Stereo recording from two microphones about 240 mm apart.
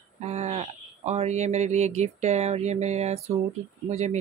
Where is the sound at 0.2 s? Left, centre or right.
Right.